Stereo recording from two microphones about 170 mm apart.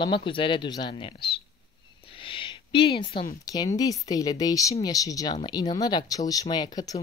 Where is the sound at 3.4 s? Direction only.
20° left (ahead or behind).